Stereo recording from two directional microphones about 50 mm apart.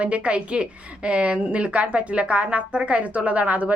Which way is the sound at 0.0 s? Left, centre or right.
Right.